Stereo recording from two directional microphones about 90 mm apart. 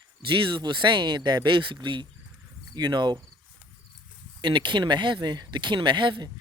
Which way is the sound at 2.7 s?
55° right (ahead or behind).